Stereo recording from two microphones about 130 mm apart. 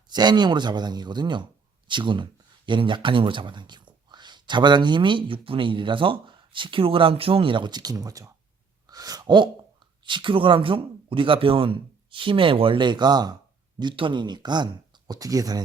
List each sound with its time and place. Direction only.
0.1 s speech: 35° right (ahead or behind)
8.9 s sigh: 30° right (ahead or behind)
10.0 s speech: 40° right (ahead or behind)